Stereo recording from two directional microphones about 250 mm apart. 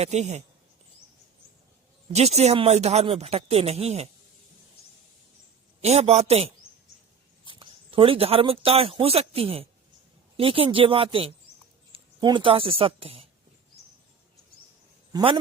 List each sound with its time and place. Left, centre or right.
0.0 s speech: right
2.1 s speech: right
5.8 s speech: right
15.1 s a man's voice: right